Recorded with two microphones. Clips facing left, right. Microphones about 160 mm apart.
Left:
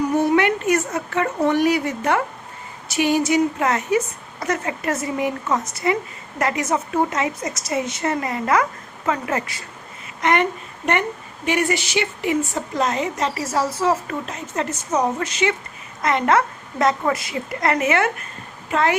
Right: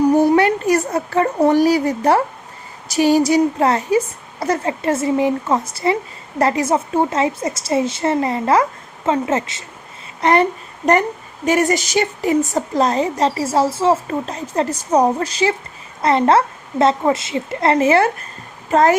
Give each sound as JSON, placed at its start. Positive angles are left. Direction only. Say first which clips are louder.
{"t": 0.1, "sound": "a woman's voice", "louder": "right 5 dB", "side_deg": -35}